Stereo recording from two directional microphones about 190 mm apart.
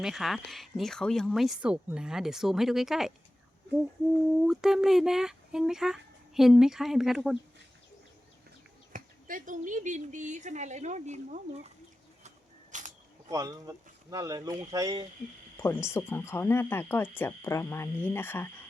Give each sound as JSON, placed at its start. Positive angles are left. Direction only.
{"t": 0.0, "sound": "speech", "side_deg": 0}
{"t": 4.4, "sound": "speech", "side_deg": 0}
{"t": 8.9, "sound": "speech", "side_deg": -45}
{"t": 12.7, "sound": "single-lens reflex camera", "side_deg": -40}
{"t": 13.3, "sound": "speech", "side_deg": -15}
{"t": 15.5, "sound": "speech", "side_deg": 15}